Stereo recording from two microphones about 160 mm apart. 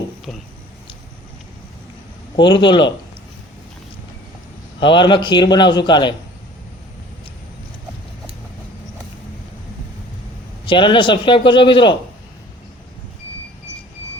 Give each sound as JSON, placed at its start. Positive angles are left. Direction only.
{"t": 2.3, "sound": "a man's voice", "side_deg": 30}
{"t": 4.8, "sound": "a man's voice", "side_deg": 30}
{"t": 10.7, "sound": "a man's voice", "side_deg": 30}